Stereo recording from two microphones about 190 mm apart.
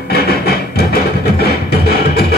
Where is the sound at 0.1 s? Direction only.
55° left (ahead or behind).